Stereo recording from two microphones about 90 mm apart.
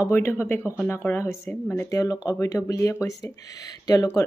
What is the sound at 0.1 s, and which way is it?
Speech, 25° left (ahead or behind).